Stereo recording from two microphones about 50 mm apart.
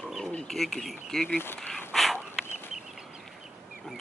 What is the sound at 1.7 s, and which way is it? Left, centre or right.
Dog, centre.